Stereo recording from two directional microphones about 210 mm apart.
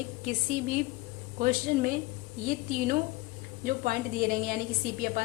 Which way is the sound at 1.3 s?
40° right (ahead or behind).